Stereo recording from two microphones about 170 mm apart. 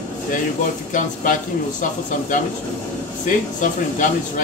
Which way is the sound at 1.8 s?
50° left (ahead or behind).